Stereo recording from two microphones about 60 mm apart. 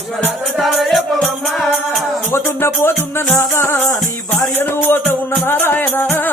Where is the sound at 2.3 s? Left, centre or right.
Left.